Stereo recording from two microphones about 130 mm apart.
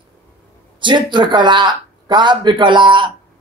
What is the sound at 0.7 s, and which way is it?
Speech, 35° right (ahead or behind).